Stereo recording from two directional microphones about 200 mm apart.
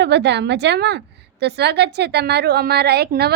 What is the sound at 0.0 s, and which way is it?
A woman's voice, 60° right (ahead or behind).